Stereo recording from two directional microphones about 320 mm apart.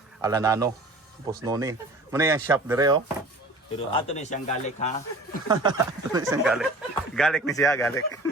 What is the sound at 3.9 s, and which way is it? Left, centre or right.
Speech, centre.